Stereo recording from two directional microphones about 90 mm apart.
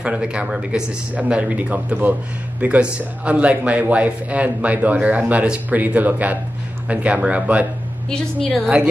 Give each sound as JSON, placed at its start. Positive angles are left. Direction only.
{"t": 0.0, "sound": "speech", "side_deg": -15}